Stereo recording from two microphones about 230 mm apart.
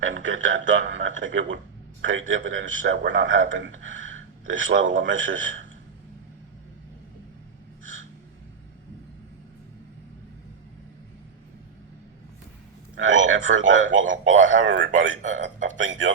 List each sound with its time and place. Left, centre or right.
0.0 s a man's voice: right
13.0 s a man's voice: right